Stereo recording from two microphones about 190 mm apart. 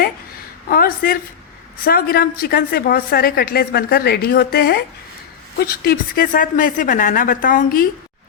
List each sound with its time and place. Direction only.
0.7 s a woman's voice: 50° left (ahead or behind)